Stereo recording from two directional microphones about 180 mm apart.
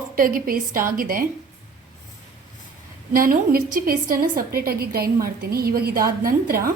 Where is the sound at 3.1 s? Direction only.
50° right (ahead or behind).